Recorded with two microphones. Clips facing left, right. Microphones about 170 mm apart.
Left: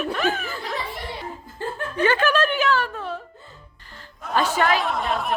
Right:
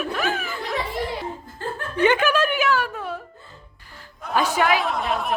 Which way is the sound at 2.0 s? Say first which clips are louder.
Right 1 dB; 15° right (ahead or behind).